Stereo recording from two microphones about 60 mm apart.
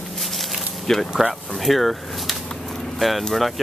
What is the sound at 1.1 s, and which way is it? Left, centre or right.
Speech, centre.